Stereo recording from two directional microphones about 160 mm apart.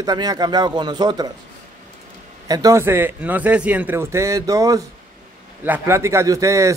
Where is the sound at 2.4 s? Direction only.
20° right (ahead or behind).